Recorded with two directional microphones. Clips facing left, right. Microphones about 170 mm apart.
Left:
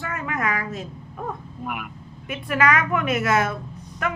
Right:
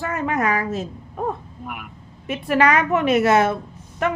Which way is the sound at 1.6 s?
90° left.